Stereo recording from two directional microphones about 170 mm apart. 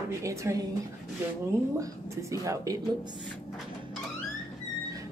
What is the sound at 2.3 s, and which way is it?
Speech, 20° right (ahead or behind).